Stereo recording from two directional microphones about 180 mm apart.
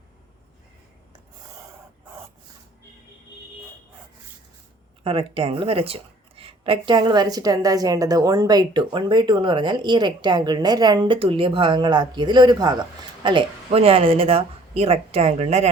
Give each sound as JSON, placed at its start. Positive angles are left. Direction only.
{"t": 5.0, "sound": "a woman's voice", "side_deg": -30}